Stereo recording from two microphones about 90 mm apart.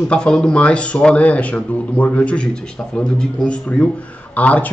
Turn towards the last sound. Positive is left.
turn(degrees=15)  # may be behind; listen again after turning